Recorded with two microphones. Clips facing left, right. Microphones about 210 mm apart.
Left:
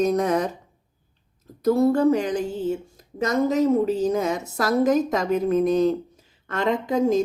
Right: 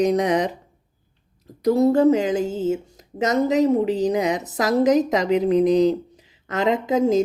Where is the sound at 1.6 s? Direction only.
15° right (ahead or behind).